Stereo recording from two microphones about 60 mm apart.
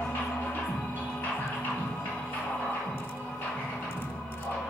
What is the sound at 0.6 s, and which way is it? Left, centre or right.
Music, centre.